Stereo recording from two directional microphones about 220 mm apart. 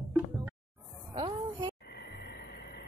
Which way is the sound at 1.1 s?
20° right (ahead or behind).